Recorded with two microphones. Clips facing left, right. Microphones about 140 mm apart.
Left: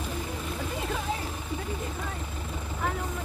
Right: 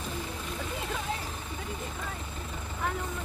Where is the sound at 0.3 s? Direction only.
5° left (ahead or behind).